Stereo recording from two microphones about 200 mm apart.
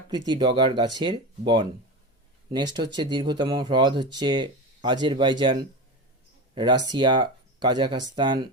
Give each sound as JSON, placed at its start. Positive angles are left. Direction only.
{"t": 0.3, "sound": "speech", "side_deg": -20}